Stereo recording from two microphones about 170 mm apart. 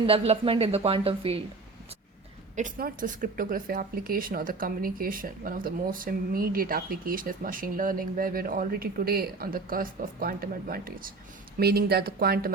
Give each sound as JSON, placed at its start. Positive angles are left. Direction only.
{"t": 0.1, "sound": "speech", "side_deg": -35}
{"t": 2.6, "sound": "speech", "side_deg": -50}